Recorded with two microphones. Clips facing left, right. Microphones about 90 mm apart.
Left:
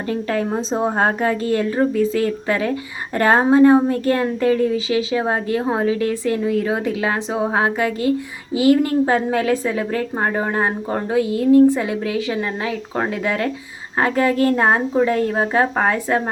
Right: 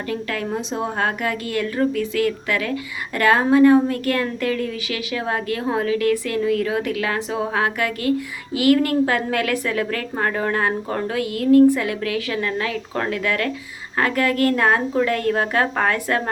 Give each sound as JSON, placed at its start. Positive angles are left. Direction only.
{"t": 0.1, "sound": "a woman's voice", "side_deg": 30}